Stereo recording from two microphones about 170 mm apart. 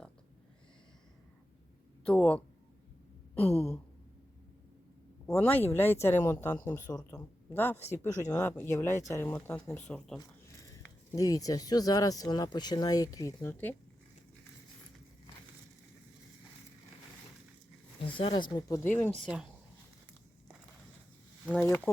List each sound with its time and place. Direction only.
2.0 s speech: 10° left (ahead or behind)
3.3 s a sound: 35° left (ahead or behind)
5.2 s speech: 10° left (ahead or behind)
11.1 s speech: 20° left (ahead or behind)
18.0 s speech: 30° left (ahead or behind); by 19.1 s 10° left (ahead or behind)
19.2 s speech: 5° right (ahead or behind)
21.6 s speech: 10° left (ahead or behind)